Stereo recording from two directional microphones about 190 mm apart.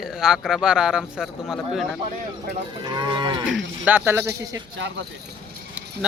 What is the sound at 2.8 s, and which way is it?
Cattle, 25° right (ahead or behind).